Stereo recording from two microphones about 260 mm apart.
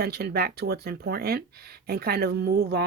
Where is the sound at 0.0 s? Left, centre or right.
Right.